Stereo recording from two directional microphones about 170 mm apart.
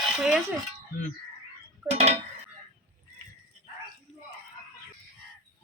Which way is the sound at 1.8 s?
40° right (ahead or behind).